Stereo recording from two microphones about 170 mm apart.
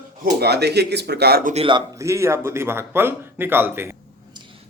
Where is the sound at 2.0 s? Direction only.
15° right (ahead or behind).